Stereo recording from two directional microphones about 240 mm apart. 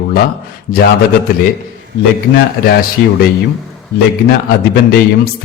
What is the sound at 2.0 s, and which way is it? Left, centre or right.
Speech, left.